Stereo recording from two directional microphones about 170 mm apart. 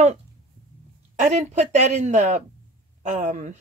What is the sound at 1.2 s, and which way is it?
Speech, 45° right (ahead or behind).